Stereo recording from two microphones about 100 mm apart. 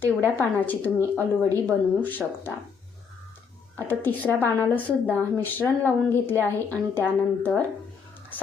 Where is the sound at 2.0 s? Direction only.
20° left (ahead or behind).